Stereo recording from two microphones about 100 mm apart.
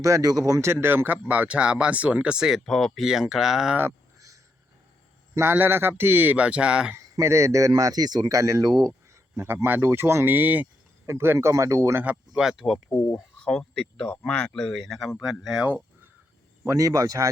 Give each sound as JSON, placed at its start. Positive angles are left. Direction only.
{"t": 0.0, "sound": "speech", "side_deg": -35}
{"t": 5.3, "sound": "speech", "side_deg": -25}
{"t": 6.9, "sound": "speech", "side_deg": -30}
{"t": 12.4, "sound": "speech", "side_deg": -5}
{"t": 12.9, "sound": "speech", "side_deg": 30}
{"t": 13.4, "sound": "speech", "side_deg": 10}
{"t": 16.6, "sound": "speech", "side_deg": -35}